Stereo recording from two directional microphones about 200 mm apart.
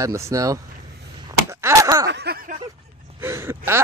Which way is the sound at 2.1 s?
55° right (ahead or behind).